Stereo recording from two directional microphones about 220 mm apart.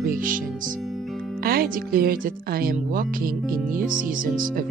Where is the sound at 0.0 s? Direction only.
40° right (ahead or behind).